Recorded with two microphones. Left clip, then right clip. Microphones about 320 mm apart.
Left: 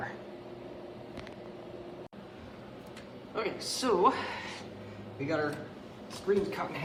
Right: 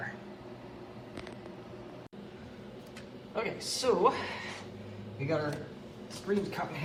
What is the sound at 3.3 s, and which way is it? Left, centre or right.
Speech, centre.